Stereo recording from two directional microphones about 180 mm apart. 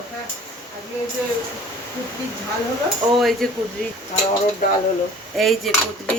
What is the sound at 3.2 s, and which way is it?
Cutlery, centre (ahead or behind).